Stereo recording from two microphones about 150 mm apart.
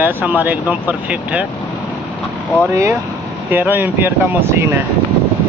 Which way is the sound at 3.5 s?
15° right (ahead or behind).